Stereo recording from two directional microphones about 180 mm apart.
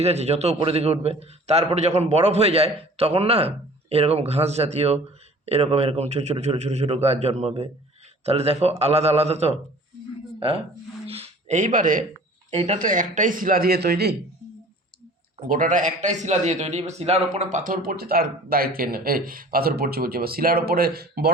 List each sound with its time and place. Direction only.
0.0 s a man's voice: 35° right (ahead or behind)
11.0 s a sound: 35° right (ahead or behind)
12.5 s speech: 35° right (ahead or behind)
12.8 s speech: 45° right (ahead or behind); by 14.2 s 60° right (ahead or behind)
15.4 s a man's voice: 50° right (ahead or behind)